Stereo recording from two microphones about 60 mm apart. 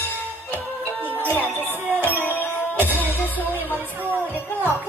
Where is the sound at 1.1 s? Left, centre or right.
Left.